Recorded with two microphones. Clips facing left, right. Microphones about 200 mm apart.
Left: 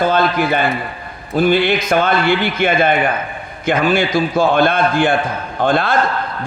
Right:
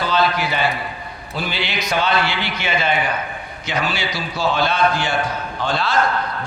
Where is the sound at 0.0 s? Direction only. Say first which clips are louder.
Left 5 dB; 50° left (ahead or behind).